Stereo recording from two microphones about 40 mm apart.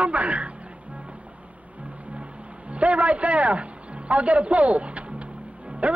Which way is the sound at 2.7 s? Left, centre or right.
Right.